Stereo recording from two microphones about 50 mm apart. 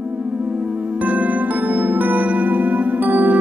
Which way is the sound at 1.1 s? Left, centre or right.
Right.